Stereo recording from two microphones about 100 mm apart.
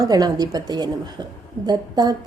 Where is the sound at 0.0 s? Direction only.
40° right (ahead or behind).